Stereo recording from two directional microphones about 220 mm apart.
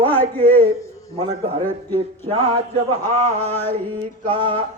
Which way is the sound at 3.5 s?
10° left (ahead or behind).